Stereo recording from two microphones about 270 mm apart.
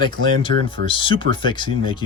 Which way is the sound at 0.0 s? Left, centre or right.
Centre.